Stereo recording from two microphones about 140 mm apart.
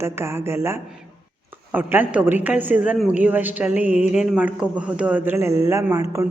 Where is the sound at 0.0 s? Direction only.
20° right (ahead or behind).